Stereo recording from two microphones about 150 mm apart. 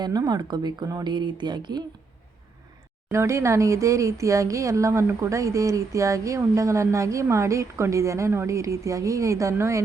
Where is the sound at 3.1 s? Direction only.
20° right (ahead or behind).